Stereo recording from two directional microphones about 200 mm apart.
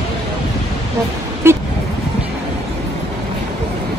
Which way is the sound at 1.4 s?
10° right (ahead or behind).